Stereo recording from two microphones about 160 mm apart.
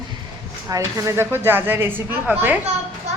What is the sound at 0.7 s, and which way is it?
A woman's voice, 20° right (ahead or behind).